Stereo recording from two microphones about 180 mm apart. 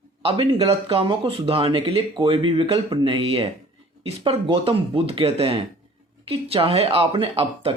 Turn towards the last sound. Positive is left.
turn(degrees=-30)  # may be behind; listen again after turning